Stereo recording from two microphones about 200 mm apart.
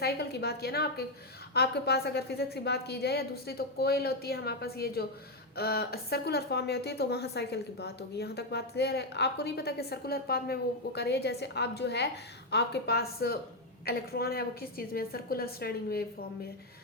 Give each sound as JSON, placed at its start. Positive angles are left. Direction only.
{"t": 0.0, "sound": "a woman's voice", "side_deg": 55}